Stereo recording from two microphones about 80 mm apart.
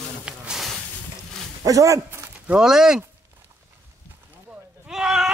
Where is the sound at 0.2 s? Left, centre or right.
Centre.